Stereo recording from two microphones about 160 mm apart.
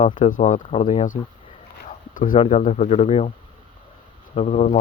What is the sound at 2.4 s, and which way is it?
Speech, 45° left (ahead or behind).